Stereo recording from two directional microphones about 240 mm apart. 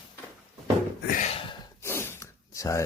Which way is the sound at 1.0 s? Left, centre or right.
Left.